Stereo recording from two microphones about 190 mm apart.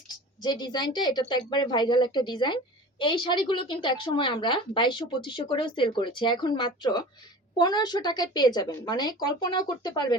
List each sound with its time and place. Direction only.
0.1 s a woman's voice: 25° left (ahead or behind)